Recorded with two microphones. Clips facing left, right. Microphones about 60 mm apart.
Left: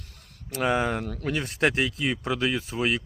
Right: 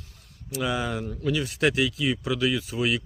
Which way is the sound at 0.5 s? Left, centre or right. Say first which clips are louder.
Left 3 dB; left.